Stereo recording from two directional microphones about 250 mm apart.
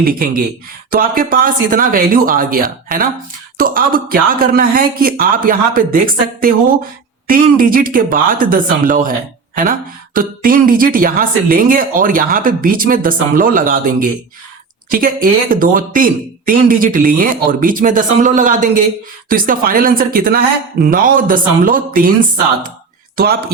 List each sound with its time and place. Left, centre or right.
0.0 s speech: right
10.2 s speech: right